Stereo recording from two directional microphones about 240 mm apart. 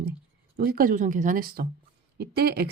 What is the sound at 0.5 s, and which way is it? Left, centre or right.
Speech, right.